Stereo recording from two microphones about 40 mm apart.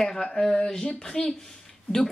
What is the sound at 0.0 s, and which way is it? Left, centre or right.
A woman's voice, centre.